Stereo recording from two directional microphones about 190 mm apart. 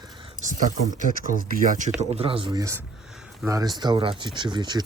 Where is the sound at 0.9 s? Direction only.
45° right (ahead or behind).